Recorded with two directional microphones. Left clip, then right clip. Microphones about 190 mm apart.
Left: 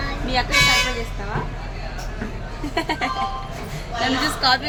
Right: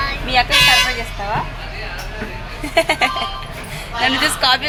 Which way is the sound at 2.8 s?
20° right (ahead or behind).